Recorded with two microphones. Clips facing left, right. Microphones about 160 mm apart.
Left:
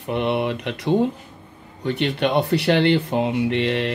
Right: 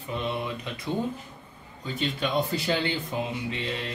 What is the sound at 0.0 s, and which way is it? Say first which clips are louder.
Speech: left 9 dB; 70° left (ahead or behind).